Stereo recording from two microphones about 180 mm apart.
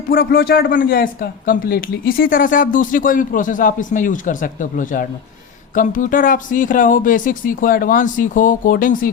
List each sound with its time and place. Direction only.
0.1 s a man's voice: 55° left (ahead or behind)